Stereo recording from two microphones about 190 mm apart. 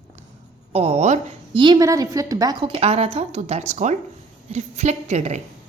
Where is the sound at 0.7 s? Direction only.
30° right (ahead or behind).